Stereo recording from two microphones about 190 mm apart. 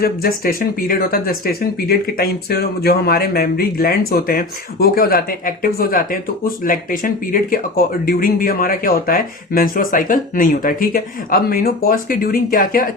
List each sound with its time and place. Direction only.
0.0 s speech: 50° left (ahead or behind)